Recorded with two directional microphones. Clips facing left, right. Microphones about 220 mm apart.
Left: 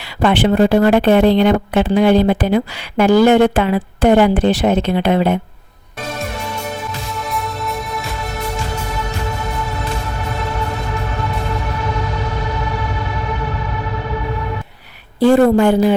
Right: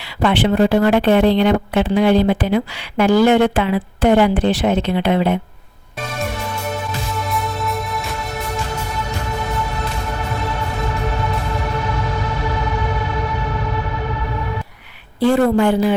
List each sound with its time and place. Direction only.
0.2 s speech: 45° left (ahead or behind)
6.9 s music: centre (ahead or behind)
15.2 s speech: 45° left (ahead or behind)